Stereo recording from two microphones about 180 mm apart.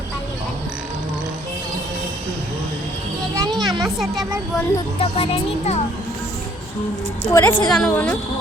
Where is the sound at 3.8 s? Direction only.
Centre (ahead or behind).